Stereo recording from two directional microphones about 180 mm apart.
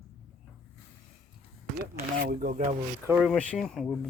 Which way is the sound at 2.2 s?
60° right (ahead or behind).